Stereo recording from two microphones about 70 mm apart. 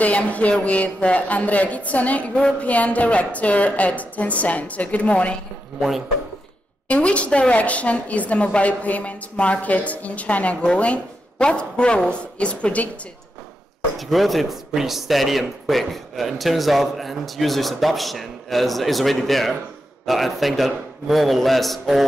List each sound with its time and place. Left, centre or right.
0.0 s a woman's voice: left
5.8 s speech: centre
6.9 s a woman's voice: centre
13.9 s speech: centre